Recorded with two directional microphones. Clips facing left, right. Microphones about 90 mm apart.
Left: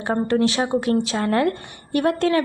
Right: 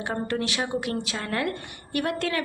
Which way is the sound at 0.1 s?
30° left (ahead or behind).